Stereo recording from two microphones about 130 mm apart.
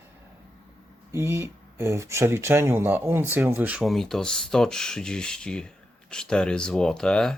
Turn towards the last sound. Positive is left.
turn(degrees=5)  # may be behind; listen again after turning